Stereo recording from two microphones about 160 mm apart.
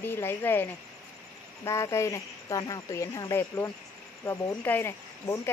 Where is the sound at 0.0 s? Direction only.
15° left (ahead or behind).